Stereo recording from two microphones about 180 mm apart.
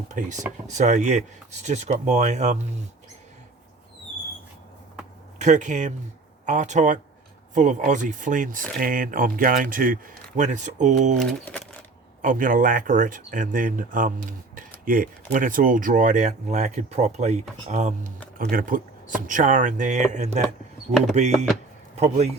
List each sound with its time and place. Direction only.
0.1 s speech: 40° right (ahead or behind)
5.4 s speech: 40° right (ahead or behind)
12.2 s speech: 50° right (ahead or behind)